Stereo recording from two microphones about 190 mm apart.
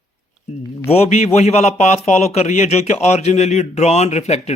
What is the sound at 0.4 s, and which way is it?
A man's voice, 35° left (ahead or behind).